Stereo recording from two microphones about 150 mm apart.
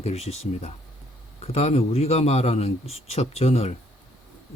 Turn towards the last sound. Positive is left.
turn(degrees=40)  # may be behind; listen again after turning